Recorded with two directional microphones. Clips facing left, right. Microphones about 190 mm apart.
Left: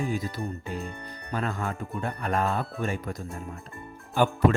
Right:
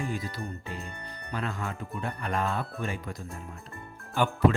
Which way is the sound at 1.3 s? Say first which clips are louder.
Left 4 dB; 45° left (ahead or behind).